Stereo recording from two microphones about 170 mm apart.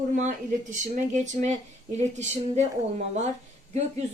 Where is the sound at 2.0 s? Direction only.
40° right (ahead or behind).